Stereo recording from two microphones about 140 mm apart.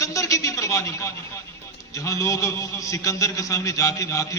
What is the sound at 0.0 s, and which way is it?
A man's voice, 25° left (ahead or behind).